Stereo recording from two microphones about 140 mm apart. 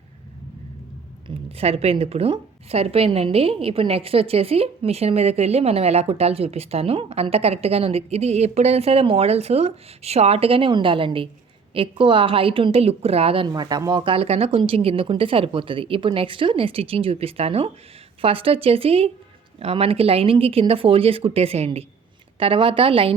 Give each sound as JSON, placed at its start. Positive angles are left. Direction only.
{"t": 1.5, "sound": "a woman's voice", "side_deg": -45}